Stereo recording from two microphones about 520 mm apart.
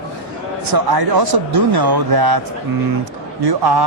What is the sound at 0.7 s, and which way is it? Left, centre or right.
Speech, right.